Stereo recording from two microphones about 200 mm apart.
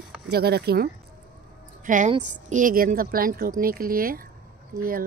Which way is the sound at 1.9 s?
40° right (ahead or behind).